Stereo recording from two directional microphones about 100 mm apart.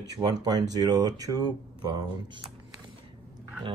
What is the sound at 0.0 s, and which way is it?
Speech, 40° right (ahead or behind).